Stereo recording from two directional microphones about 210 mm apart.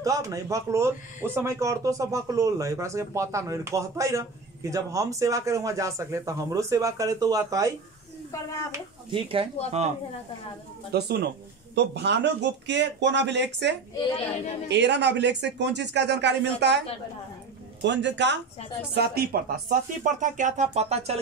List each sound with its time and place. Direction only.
0.0 s speech: 15° right (ahead or behind)
8.7 s speech: 25° right (ahead or behind)
10.9 s speech: 50° right (ahead or behind)
14.0 s speech: 25° left (ahead or behind)
14.7 s speech: 55° right (ahead or behind)
17.8 s speech: 55° right (ahead or behind); by 21.2 s 30° right (ahead or behind)